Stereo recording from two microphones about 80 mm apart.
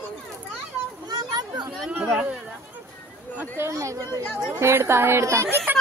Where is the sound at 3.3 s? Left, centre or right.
Right.